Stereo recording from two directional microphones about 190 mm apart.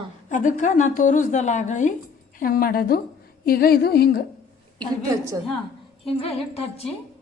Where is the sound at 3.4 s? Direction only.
50° left (ahead or behind).